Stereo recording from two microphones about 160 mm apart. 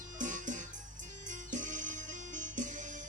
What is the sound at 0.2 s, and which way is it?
Music, 50° right (ahead or behind).